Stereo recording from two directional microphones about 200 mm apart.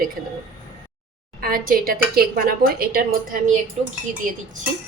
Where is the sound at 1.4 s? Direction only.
45° right (ahead or behind).